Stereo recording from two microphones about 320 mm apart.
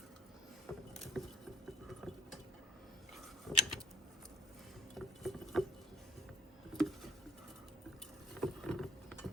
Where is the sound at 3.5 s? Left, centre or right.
Centre.